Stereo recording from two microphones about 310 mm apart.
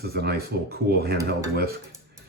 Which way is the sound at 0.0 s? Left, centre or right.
Right.